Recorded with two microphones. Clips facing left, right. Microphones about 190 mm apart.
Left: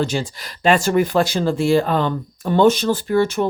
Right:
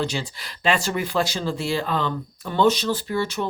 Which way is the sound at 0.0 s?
45° left (ahead or behind).